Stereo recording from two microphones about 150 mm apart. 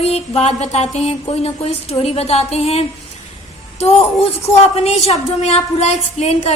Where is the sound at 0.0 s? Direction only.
45° left (ahead or behind).